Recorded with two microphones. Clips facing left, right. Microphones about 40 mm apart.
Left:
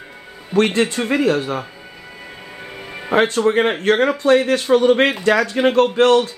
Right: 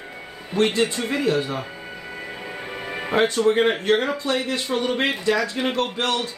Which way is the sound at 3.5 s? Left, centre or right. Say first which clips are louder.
Left 3 dB; left.